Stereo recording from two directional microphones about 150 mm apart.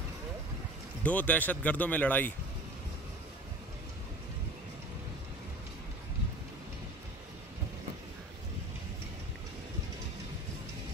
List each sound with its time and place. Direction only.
1.0 s speech: 10° left (ahead or behind)